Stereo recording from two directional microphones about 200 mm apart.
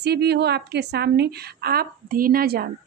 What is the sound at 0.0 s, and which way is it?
A woman's voice, 55° right (ahead or behind).